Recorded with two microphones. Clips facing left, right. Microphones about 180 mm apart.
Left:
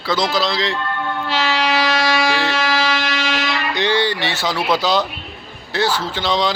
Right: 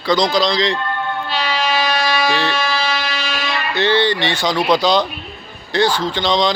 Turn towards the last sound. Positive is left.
turn(degrees=5)  # may be behind; listen again after turning